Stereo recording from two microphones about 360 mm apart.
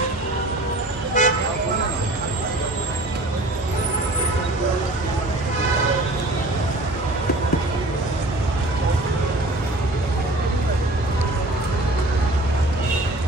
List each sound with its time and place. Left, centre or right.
1.2 s toot: centre